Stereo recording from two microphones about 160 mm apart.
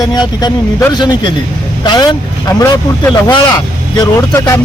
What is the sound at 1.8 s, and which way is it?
Speech, 25° left (ahead or behind).